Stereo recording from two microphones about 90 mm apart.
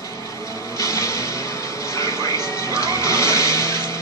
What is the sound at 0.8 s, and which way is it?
Music, 35° left (ahead or behind).